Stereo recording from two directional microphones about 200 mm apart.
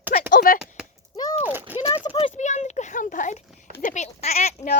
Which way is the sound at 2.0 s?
25° left (ahead or behind).